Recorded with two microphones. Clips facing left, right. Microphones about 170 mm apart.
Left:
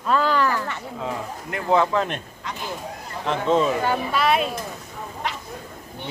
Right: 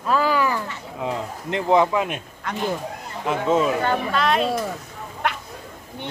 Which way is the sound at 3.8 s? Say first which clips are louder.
Even; 5° left (ahead or behind).